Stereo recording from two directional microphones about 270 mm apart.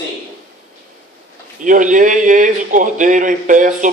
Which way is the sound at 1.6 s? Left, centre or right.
Right.